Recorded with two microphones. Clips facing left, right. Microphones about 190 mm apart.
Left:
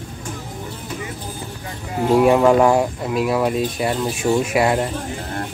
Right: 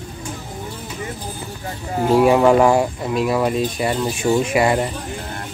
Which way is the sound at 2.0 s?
Centre (ahead or behind).